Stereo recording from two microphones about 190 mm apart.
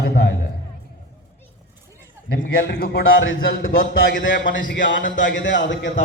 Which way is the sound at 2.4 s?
65° left (ahead or behind).